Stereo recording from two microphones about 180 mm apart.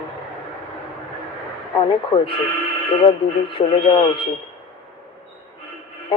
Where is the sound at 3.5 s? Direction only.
30° left (ahead or behind).